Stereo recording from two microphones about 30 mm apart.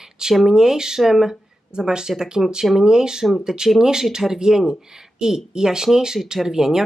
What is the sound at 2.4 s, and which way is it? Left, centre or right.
Speech, centre.